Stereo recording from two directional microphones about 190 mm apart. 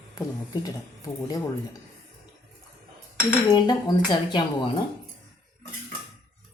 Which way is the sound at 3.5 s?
20° left (ahead or behind).